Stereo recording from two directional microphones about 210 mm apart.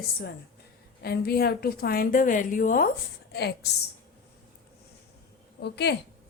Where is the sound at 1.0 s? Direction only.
50° left (ahead or behind).